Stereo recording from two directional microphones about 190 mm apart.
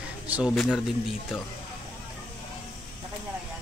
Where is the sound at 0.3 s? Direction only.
5° right (ahead or behind).